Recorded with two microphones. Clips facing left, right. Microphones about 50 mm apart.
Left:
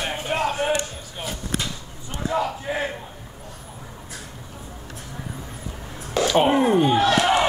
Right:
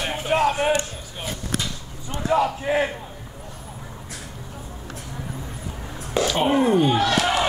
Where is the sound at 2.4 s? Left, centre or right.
Right.